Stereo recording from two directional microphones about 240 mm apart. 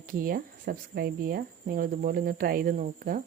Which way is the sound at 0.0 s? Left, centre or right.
Right.